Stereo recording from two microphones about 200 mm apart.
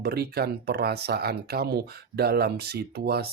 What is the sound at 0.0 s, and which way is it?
Speech, 50° right (ahead or behind).